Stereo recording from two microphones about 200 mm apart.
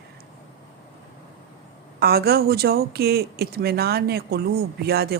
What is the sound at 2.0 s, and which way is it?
Speech, 50° right (ahead or behind).